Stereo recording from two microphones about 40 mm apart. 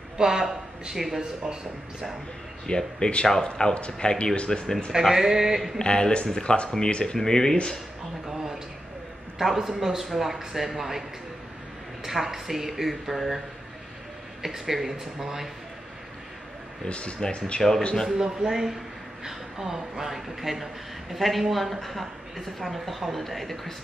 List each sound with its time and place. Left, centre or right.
0.2 s a woman's voice: centre
1.2 s speech: right
3.0 s speech: left
5.1 s speech: centre
5.8 s speech: left
9.4 s speech: centre
14.4 s speech: centre
16.8 s speech: left
17.6 s speech: centre
18.1 s speech: centre